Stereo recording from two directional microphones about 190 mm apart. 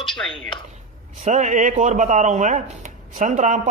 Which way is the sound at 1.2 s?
40° right (ahead or behind).